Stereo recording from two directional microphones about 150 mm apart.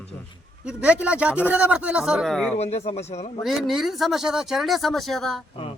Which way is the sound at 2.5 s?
45° left (ahead or behind).